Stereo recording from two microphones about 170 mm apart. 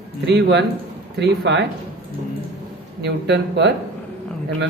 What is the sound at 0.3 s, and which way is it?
Speech, 85° right.